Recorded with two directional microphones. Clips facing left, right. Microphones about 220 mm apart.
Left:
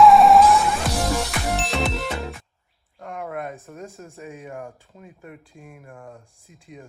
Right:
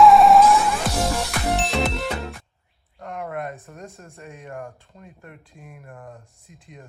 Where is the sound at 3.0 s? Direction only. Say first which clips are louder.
Right 1 dB; centre (ahead or behind).